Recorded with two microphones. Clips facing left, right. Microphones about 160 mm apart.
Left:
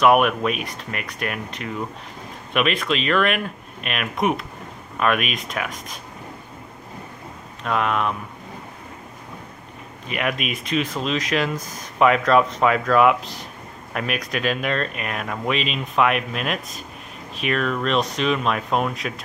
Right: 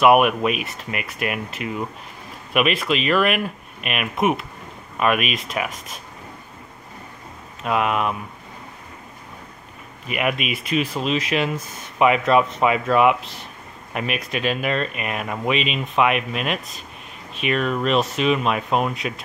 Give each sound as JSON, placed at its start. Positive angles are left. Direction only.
{"t": 0.0, "sound": "speech", "side_deg": -5}
{"t": 7.6, "sound": "speech", "side_deg": -5}
{"t": 10.0, "sound": "speech", "side_deg": -5}